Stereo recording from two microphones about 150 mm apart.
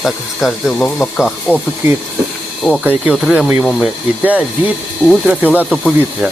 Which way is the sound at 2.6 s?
5° left (ahead or behind).